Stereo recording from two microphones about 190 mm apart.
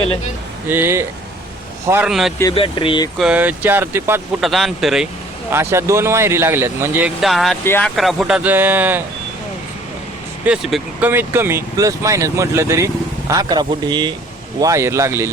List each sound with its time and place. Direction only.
0.7 s speech: 10° right (ahead or behind)
2.4 s speech: 25° left (ahead or behind)
3.2 s speech: 5° right (ahead or behind)
4.4 s speech: centre (ahead or behind)
5.5 s speech: 15° right (ahead or behind)
7.2 s speech: centre (ahead or behind)
10.4 s speech: 5° right (ahead or behind)